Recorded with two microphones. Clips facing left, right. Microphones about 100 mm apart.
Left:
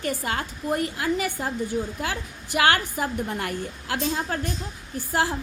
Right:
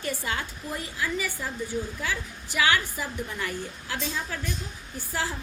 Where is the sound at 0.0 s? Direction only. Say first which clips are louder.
Left 4 dB; 45° left (ahead or behind).